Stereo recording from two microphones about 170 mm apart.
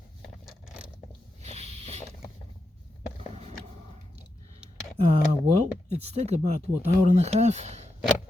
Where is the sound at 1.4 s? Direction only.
35° right (ahead or behind).